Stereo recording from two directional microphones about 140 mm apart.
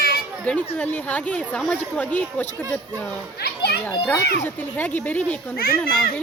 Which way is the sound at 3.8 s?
15° left (ahead or behind).